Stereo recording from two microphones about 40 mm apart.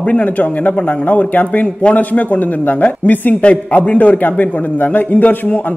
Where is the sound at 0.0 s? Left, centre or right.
Left.